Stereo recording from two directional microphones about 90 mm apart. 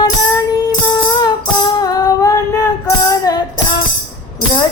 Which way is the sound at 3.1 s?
45° left (ahead or behind).